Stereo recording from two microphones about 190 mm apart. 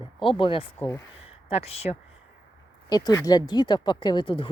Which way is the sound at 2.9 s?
20° left (ahead or behind).